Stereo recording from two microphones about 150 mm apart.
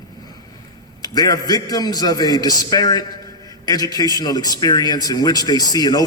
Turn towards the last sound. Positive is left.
turn(degrees=25)  # may be behind; listen again after turning